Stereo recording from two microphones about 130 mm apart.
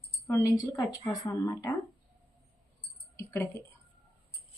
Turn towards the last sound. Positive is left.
turn(degrees=20)  # may be behind; listen again after turning